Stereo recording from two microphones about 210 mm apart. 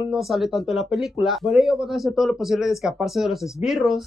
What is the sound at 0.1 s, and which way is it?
Speech, centre (ahead or behind).